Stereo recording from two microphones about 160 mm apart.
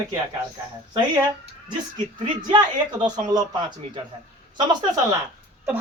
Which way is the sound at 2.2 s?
30° right (ahead or behind).